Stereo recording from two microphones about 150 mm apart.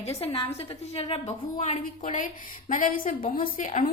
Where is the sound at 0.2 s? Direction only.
40° left (ahead or behind).